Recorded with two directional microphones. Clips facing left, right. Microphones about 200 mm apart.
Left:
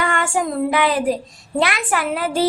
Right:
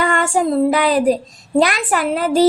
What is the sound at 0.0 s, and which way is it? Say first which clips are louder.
Child singing: right 4 dB; 40° right (ahead or behind).